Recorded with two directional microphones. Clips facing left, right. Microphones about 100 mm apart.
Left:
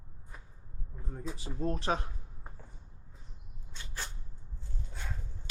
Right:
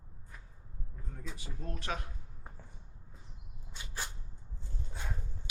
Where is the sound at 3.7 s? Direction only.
15° right (ahead or behind).